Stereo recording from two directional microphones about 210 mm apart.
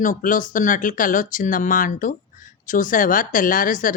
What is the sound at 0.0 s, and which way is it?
Speech, 40° left (ahead or behind).